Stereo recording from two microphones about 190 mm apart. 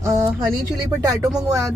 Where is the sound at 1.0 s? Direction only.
20° right (ahead or behind).